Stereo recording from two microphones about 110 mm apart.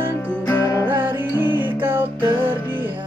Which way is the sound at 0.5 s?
35° left (ahead or behind).